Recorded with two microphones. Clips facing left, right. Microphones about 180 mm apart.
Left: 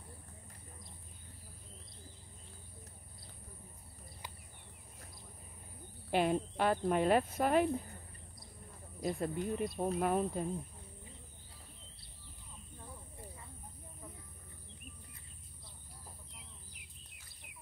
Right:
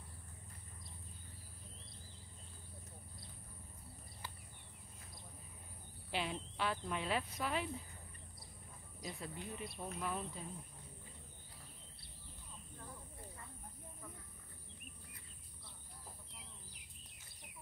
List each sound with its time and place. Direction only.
6.0 s speech: 50° left (ahead or behind)
9.0 s speech: 50° left (ahead or behind)